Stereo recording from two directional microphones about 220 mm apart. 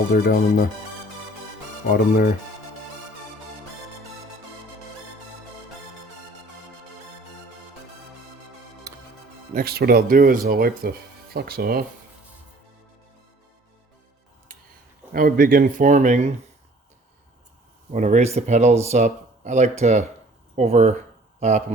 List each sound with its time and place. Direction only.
0.1 s speech: 45° left (ahead or behind)
1.9 s speech: 45° left (ahead or behind)
8.9 s music: 15° right (ahead or behind)
9.6 s speech: 45° right (ahead or behind)
15.1 s speech: 40° right (ahead or behind)
17.9 s speech: 30° right (ahead or behind)